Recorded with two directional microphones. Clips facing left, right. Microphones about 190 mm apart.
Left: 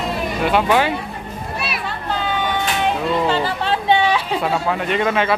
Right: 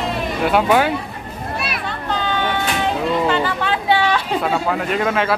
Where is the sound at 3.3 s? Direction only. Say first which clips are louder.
Even; 30° left (ahead or behind).